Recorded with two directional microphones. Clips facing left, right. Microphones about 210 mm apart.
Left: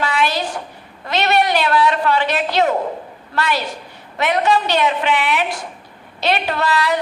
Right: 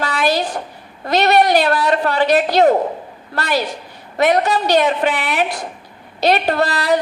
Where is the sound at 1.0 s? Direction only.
40° right (ahead or behind).